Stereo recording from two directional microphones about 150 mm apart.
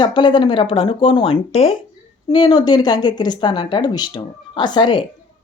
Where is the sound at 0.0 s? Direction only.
30° left (ahead or behind).